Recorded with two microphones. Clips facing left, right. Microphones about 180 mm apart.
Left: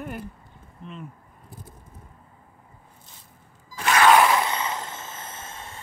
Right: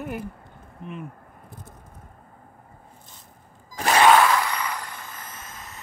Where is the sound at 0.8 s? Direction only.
60° right (ahead or behind).